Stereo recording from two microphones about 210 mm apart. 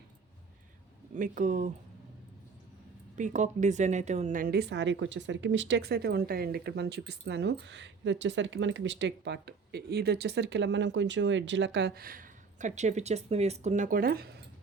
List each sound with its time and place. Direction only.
1.1 s speech: 40° right (ahead or behind)
3.2 s a woman's voice: 35° right (ahead or behind)